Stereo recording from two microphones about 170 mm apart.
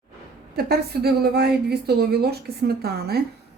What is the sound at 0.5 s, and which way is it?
A woman's voice, 70° right (ahead or behind).